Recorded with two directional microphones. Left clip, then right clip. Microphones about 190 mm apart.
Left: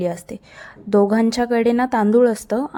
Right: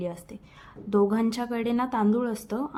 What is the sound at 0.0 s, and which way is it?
A woman's voice, 35° left (ahead or behind).